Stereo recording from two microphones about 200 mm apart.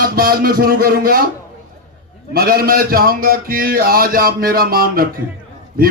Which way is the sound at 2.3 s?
50° right (ahead or behind).